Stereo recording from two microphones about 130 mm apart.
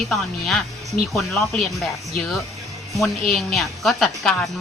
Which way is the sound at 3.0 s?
Centre (ahead or behind).